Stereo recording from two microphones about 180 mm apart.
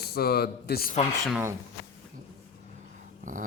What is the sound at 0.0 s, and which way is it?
Speech, 60° left (ahead or behind).